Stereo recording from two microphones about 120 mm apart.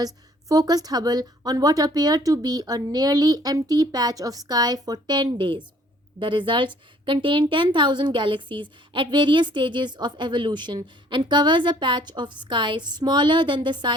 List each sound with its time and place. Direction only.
0.0 s a woman's voice: 30° right (ahead or behind)